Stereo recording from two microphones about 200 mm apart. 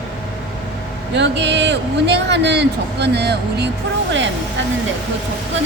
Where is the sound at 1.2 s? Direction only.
60° right (ahead or behind).